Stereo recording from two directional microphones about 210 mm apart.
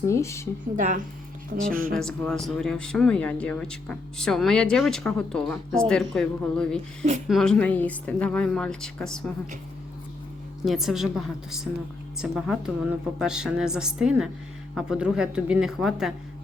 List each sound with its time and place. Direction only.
0.1 s speech: 15° left (ahead or behind)
0.8 s speech: 35° right (ahead or behind)
1.9 s a man's voice: 5° left (ahead or behind)
10.7 s a man's voice: centre (ahead or behind)